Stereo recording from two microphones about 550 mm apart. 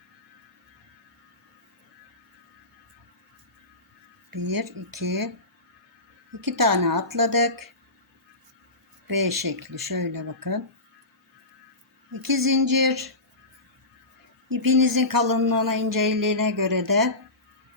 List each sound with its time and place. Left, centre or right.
4.3 s speech: right
6.4 s speech: right
9.0 s speech: right
12.1 s speech: right
14.5 s speech: right